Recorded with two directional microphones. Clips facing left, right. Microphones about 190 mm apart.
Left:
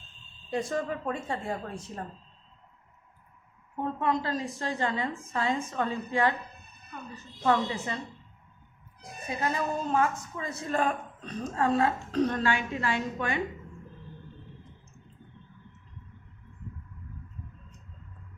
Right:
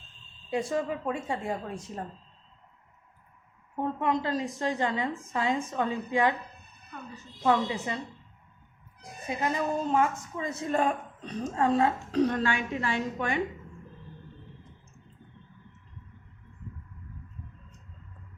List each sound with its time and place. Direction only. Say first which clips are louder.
0.5 s a woman's voice: right 1 dB; 10° right (ahead or behind)
3.8 s a woman's voice: right 1 dB; 15° right (ahead or behind)
7.4 s a woman's voice: right 1 dB; 15° right (ahead or behind)
9.2 s a woman's voice: right 1 dB; 20° right (ahead or behind)